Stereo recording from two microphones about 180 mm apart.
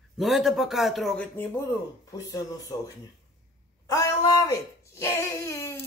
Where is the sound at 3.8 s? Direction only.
20° left (ahead or behind).